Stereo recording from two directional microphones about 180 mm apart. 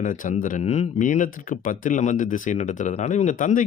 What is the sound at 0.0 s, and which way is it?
Speech, 45° left (ahead or behind).